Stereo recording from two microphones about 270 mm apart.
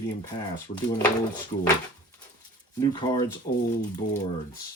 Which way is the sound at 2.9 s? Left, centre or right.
Centre.